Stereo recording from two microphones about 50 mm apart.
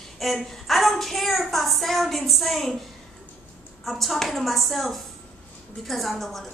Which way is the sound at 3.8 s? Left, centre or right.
Centre.